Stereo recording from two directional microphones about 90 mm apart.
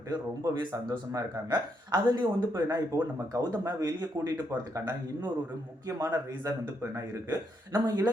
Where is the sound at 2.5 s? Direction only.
35° right (ahead or behind).